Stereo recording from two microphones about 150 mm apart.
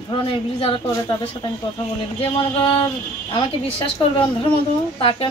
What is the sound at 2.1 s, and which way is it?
Speech, 35° left (ahead or behind).